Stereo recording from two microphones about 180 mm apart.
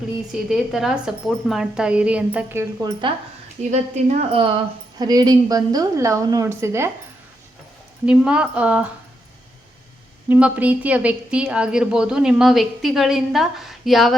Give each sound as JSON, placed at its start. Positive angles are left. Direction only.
{"t": 0.3, "sound": "a woman's voice", "side_deg": 0}
{"t": 3.6, "sound": "a woman's voice", "side_deg": -40}
{"t": 4.9, "sound": "a woman's voice", "side_deg": -20}
{"t": 8.0, "sound": "speech", "side_deg": -5}
{"t": 10.2, "sound": "a woman's voice", "side_deg": -10}